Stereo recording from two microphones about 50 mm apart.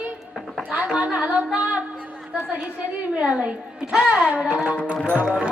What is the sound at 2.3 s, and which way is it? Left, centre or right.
A woman's voice, centre.